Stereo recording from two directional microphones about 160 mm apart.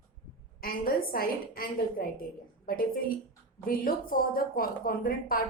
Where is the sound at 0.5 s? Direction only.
65° left (ahead or behind).